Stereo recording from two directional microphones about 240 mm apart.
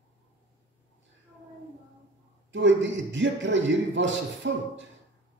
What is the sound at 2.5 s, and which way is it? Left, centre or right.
A man's voice, right.